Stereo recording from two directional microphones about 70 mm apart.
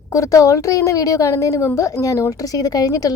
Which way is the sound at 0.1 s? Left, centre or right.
Left.